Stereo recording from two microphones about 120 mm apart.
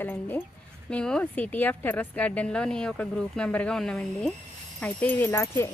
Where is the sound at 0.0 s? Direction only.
15° left (ahead or behind).